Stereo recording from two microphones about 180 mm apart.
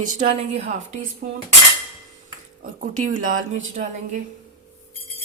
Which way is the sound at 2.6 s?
45° right (ahead or behind).